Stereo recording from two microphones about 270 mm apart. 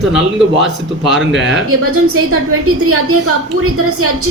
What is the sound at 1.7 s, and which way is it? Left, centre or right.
A woman's voice, right.